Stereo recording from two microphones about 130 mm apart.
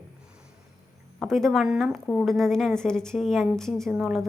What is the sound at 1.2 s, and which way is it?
A woman's voice, centre (ahead or behind).